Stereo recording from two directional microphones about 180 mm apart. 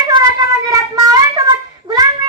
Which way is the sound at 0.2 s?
20° right (ahead or behind).